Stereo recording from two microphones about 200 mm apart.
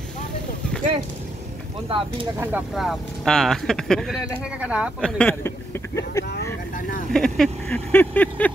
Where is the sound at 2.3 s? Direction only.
10° right (ahead or behind).